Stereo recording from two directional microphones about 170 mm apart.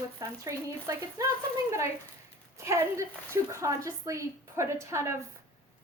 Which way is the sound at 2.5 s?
15° right (ahead or behind).